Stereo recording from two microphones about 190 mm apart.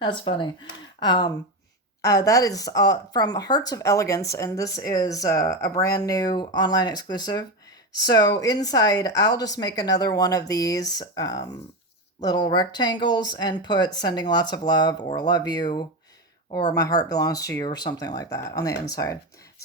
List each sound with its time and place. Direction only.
0.0 s a woman's voice: 25° left (ahead or behind)